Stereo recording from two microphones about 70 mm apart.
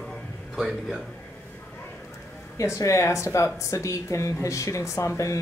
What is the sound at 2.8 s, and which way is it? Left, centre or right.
Speech, left.